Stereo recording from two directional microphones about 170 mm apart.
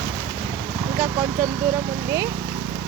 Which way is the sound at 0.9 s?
10° right (ahead or behind).